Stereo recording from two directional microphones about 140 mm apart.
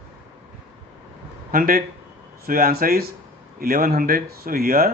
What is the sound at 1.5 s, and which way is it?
Speech, 90° right.